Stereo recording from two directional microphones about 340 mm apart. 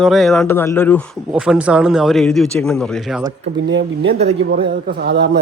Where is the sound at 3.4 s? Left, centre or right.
Right.